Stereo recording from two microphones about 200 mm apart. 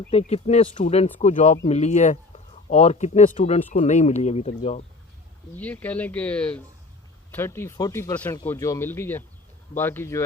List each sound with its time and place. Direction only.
0.1 s speech: 30° left (ahead or behind)
5.5 s speech: 10° left (ahead or behind)